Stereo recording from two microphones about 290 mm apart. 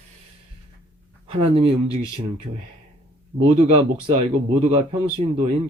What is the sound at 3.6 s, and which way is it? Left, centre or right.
Speech, centre.